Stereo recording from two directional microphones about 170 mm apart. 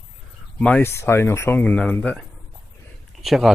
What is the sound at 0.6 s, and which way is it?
Speech, 10° left (ahead or behind).